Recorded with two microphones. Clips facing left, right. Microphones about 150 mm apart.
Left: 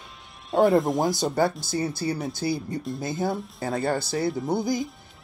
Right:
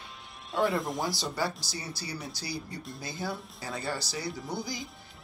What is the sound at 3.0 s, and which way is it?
Speech, 50° left (ahead or behind).